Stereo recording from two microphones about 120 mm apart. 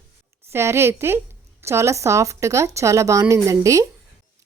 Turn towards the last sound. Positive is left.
turn(degrees=-25)  # may be behind; listen again after turning